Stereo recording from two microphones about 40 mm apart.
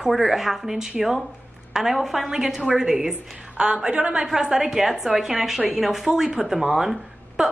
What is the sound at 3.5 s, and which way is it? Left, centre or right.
Speech, right.